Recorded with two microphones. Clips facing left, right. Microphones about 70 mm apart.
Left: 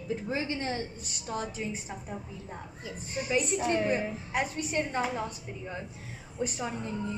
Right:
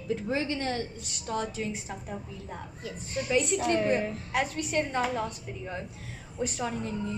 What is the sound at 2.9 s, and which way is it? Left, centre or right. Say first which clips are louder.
A woman's voice: right 2 dB; centre.